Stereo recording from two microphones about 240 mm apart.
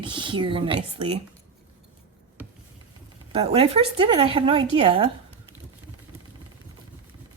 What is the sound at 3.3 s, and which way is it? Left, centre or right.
A woman's voice, right.